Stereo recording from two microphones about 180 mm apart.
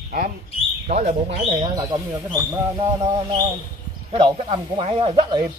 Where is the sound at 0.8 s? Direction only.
40° right (ahead or behind).